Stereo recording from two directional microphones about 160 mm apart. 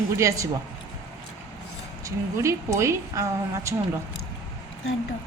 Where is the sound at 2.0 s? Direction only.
20° right (ahead or behind).